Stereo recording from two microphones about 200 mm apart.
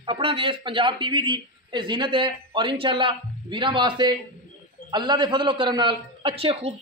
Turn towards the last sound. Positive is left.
turn(degrees=-30)  # may be behind; listen again after turning